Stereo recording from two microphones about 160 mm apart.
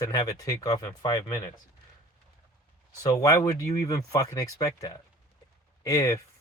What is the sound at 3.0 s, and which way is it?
Speech, 20° left (ahead or behind).